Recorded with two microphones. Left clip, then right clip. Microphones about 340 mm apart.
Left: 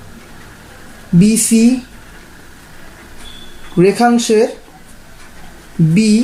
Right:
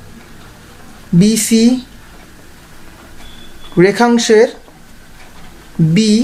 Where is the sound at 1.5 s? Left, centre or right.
Right.